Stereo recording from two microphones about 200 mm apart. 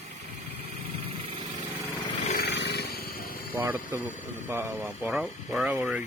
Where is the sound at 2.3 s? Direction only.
55° left (ahead or behind).